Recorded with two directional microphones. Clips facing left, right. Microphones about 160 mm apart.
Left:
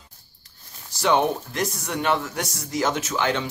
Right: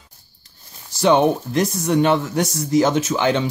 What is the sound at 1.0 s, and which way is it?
Speech, 25° right (ahead or behind).